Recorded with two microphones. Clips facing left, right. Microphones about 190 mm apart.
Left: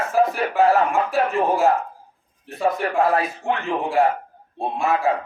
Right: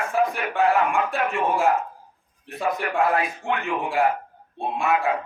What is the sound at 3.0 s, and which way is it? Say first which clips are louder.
Speech: left 3 dB; 35° left (ahead or behind).